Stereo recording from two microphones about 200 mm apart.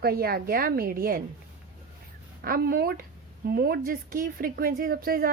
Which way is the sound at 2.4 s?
50° right (ahead or behind).